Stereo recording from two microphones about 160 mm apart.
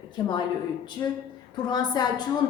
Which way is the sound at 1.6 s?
25° left (ahead or behind).